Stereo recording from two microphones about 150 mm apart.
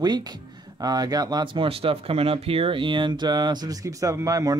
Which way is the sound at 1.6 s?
40° right (ahead or behind).